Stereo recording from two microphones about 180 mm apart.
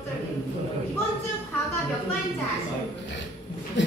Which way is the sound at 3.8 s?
90° left.